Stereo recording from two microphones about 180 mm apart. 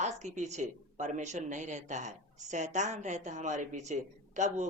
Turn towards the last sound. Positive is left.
turn(degrees=-40)  # may be behind; listen again after turning